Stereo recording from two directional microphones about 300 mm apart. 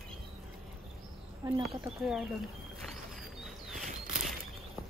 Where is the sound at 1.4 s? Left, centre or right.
Centre.